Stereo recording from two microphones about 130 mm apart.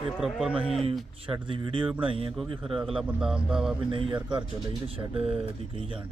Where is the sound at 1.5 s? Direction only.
40° right (ahead or behind).